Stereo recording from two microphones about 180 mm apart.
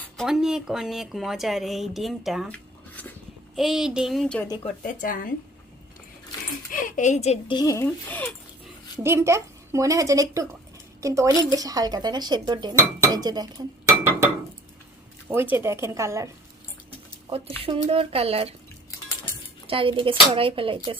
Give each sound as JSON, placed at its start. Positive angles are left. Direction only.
{"t": 0.0, "sound": "speech", "side_deg": 0}
{"t": 4.8, "sound": "speech", "side_deg": 50}
{"t": 6.7, "sound": "speech", "side_deg": 50}
{"t": 7.5, "sound": "speech", "side_deg": 20}
{"t": 9.0, "sound": "a woman's voice", "side_deg": -15}
{"t": 15.3, "sound": "a woman's voice", "side_deg": -10}
{"t": 17.6, "sound": "speech", "side_deg": -30}
{"t": 19.6, "sound": "speech", "side_deg": -30}